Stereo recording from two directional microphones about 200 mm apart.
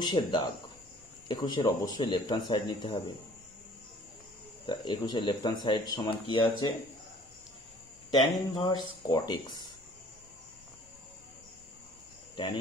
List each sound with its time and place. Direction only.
0.0 s speech: 20° left (ahead or behind)
4.6 s speech: 20° left (ahead or behind)
8.1 s speech: 20° left (ahead or behind)